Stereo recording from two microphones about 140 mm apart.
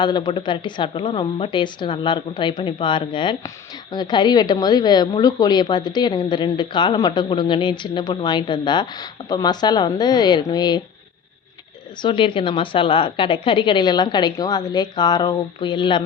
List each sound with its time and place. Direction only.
0.0 s a woman's voice: 30° left (ahead or behind)
12.0 s a woman's voice: 35° left (ahead or behind)